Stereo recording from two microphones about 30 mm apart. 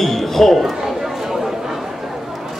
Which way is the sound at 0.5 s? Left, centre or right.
Centre.